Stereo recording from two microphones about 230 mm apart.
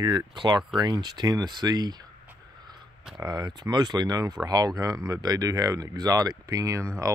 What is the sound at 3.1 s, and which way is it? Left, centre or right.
Speech, centre.